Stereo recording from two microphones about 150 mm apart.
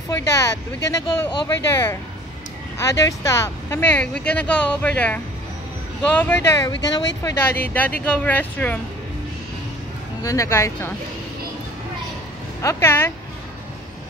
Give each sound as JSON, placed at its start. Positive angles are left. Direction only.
{"t": 0.1, "sound": "speech", "side_deg": 20}
{"t": 6.6, "sound": "speech", "side_deg": 30}
{"t": 7.7, "sound": "speech", "side_deg": 10}
{"t": 10.2, "sound": "speech", "side_deg": 20}
{"t": 12.6, "sound": "speech", "side_deg": 15}